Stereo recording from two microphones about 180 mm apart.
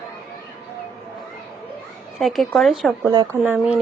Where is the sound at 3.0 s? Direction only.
20° right (ahead or behind).